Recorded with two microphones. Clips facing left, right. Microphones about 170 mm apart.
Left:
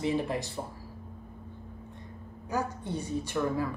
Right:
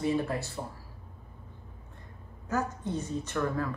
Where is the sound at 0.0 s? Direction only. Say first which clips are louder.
Even; 15° left (ahead or behind).